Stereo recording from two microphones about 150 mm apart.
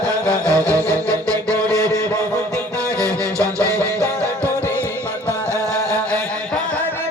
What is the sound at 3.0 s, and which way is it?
Music, 20° right (ahead or behind).